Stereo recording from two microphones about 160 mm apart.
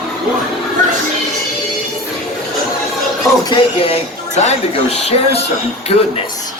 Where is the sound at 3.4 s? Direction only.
35° left (ahead or behind).